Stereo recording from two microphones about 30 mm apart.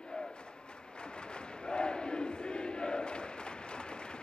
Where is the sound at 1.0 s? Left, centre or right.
Left.